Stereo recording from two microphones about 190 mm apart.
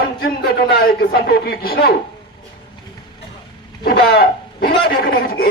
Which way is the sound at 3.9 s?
55° left (ahead or behind).